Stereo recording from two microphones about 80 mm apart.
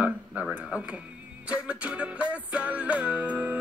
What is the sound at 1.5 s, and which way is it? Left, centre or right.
Music, centre.